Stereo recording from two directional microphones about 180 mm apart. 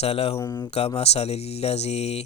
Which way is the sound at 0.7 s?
35° left (ahead or behind).